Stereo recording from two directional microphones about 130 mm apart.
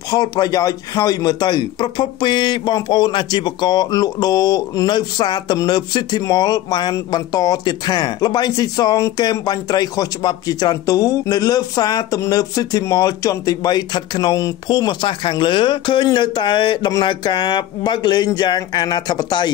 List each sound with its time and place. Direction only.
0.1 s a man's voice: 30° left (ahead or behind)